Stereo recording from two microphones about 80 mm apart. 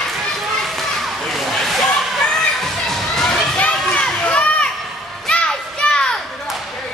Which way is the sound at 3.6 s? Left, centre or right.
Centre.